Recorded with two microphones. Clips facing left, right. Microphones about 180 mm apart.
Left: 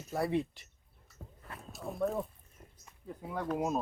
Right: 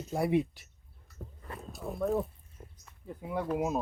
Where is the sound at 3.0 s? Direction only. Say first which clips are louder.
Right 3 dB; 5° right (ahead or behind).